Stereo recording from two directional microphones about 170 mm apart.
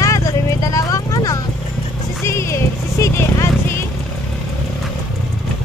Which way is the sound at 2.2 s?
15° left (ahead or behind).